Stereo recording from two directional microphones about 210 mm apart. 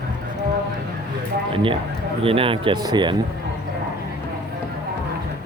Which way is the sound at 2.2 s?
25° right (ahead or behind).